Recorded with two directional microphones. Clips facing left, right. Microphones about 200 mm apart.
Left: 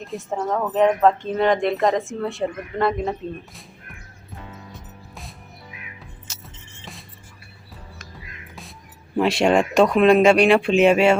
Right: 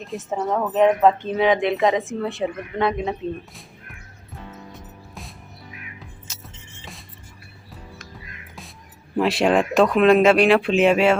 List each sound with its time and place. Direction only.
0.0 s speech: centre (ahead or behind)
9.1 s speech: centre (ahead or behind)